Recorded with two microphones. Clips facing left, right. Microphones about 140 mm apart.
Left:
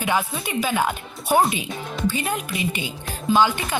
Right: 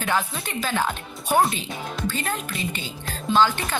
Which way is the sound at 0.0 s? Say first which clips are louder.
Left 2 dB; 10° left (ahead or behind).